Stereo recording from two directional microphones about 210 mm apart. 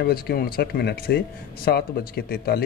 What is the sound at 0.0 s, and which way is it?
Speech, 45° left (ahead or behind).